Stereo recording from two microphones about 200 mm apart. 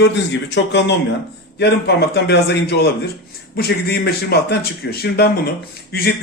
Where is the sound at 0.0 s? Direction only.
60° left (ahead or behind).